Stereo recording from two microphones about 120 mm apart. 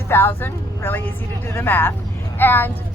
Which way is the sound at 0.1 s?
20° left (ahead or behind).